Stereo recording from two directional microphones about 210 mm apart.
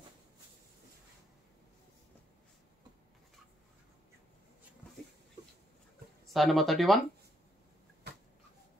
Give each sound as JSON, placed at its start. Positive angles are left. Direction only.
{"t": 6.3, "sound": "speech", "side_deg": 0}